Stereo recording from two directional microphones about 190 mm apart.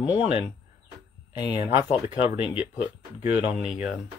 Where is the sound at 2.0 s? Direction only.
10° right (ahead or behind).